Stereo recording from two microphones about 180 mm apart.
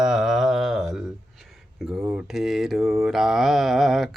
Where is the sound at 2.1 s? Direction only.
5° right (ahead or behind).